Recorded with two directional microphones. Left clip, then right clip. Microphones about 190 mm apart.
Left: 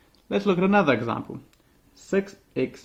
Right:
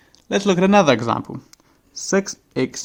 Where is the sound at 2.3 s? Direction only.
40° right (ahead or behind).